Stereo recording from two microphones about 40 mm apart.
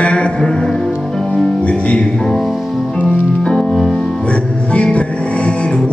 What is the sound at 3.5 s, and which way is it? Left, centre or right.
Music, centre.